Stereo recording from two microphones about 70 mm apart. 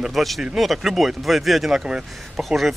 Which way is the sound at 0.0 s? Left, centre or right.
Centre.